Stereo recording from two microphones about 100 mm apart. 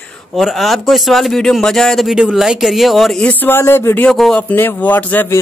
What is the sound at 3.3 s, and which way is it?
Speech, 20° left (ahead or behind).